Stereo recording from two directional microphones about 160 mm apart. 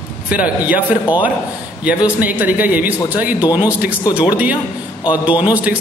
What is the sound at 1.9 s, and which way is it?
Speech, 10° right (ahead or behind).